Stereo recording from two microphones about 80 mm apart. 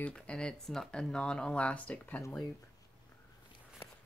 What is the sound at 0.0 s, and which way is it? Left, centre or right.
Speech, centre.